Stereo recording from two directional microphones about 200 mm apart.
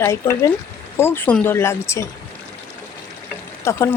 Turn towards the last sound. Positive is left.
turn(degrees=15)  # may be behind; listen again after turning